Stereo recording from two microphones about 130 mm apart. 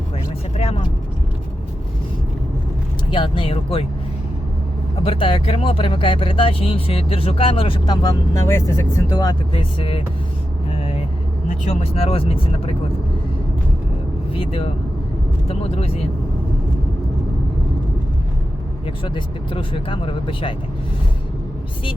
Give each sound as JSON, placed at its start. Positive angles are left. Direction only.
{"t": 0.5, "sound": "vehicle", "side_deg": 50}
{"t": 3.1, "sound": "speech", "side_deg": 40}
{"t": 5.0, "sound": "speech", "side_deg": 45}
{"t": 8.0, "sound": "speech", "side_deg": 20}
{"t": 9.1, "sound": "speech", "side_deg": 35}
{"t": 11.6, "sound": "speech", "side_deg": 50}
{"t": 14.3, "sound": "speech", "side_deg": 45}
{"t": 18.9, "sound": "speech", "side_deg": 40}